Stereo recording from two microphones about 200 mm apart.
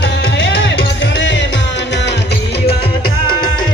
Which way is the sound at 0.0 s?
60° left (ahead or behind).